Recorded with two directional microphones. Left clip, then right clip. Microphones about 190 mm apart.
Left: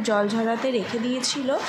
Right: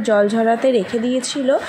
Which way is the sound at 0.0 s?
20° right (ahead or behind).